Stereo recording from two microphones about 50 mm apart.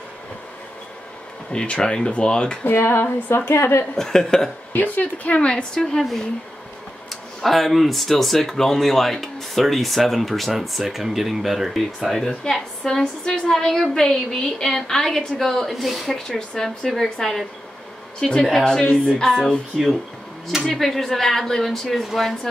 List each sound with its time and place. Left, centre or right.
1.5 s speech: centre
2.6 s speech: left
3.9 s a woman's voice: centre
4.7 s speech: left
5.3 s a woman's voice: centre
16.3 s a woman's voice: centre
19.7 s speech: centre